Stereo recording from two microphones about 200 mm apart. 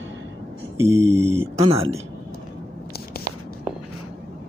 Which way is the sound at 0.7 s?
15° right (ahead or behind).